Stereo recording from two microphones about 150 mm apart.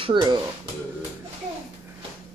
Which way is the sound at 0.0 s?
30° right (ahead or behind).